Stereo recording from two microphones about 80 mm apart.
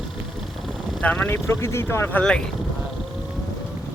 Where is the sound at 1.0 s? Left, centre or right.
Left.